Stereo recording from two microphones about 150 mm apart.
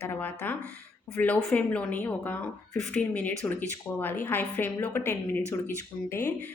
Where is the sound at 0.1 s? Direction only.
10° left (ahead or behind).